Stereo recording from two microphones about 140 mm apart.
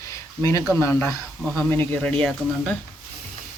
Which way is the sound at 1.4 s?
Centre (ahead or behind).